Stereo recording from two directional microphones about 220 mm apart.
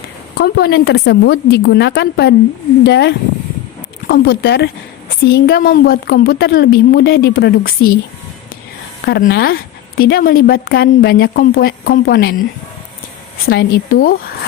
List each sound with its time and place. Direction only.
0.3 s speech: 45° left (ahead or behind)
9.0 s speech: 45° left (ahead or behind)